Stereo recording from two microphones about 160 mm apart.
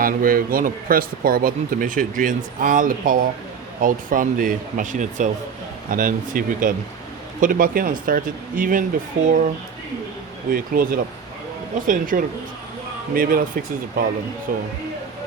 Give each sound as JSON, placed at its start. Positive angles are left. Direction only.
{"t": 0.0, "sound": "speech", "side_deg": -65}
{"t": 10.5, "sound": "speech", "side_deg": -65}